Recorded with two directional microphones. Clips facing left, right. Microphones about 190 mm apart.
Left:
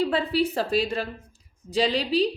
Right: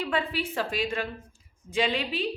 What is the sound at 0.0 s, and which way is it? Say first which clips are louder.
A woman's voice: left 6 dB; 35° left (ahead or behind).